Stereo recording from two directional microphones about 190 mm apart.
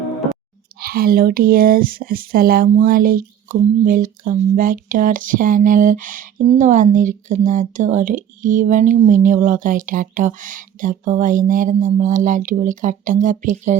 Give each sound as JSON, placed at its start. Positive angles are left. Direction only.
{"t": 0.8, "sound": "speech", "side_deg": -50}